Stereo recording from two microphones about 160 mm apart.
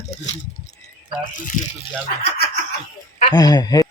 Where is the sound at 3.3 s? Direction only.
25° left (ahead or behind).